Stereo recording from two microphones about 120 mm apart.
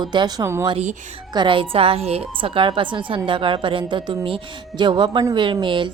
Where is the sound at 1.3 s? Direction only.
40° right (ahead or behind); by 2.2 s 55° right (ahead or behind).